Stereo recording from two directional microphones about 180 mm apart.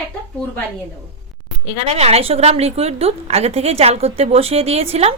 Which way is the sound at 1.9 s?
35° right (ahead or behind).